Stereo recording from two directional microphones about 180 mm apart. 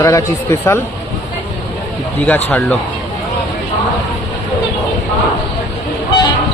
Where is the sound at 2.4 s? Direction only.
10° left (ahead or behind).